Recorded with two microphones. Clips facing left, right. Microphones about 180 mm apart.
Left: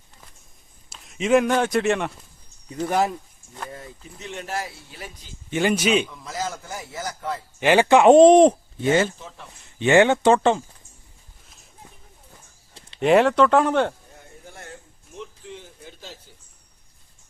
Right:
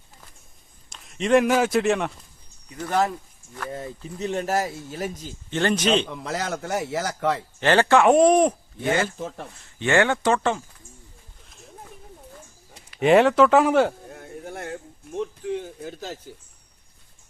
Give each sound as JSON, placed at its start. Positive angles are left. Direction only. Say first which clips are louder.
{"t": 0.9, "sound": "speech", "louder": "left 1 dB", "side_deg": 0}
{"t": 2.7, "sound": "speech", "louder": "left 1 dB", "side_deg": 15}
{"t": 3.7, "sound": "speech", "louder": "right 6 dB", "side_deg": -30}
{"t": 5.5, "sound": "speech", "louder": "left 1 dB", "side_deg": 10}
{"t": 6.1, "sound": "a man's voice", "louder": "right 2 dB", "side_deg": -65}
{"t": 7.6, "sound": "speech", "louder": "left 3 dB", "side_deg": 10}
{"t": 9.1, "sound": "speech", "louder": "right 9 dB", "side_deg": -50}
{"t": 9.6, "sound": "speech", "louder": "left 4 dB", "side_deg": 20}
{"t": 11.4, "sound": "a sound", "louder": "right 9 dB", "side_deg": 0}
{"t": 13.0, "sound": "speech", "louder": "right 1 dB", "side_deg": 0}
{"t": 14.1, "sound": "a sound", "louder": "right 9 dB", "side_deg": -65}